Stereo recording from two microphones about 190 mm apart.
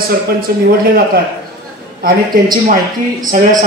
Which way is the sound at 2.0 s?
50° right (ahead or behind).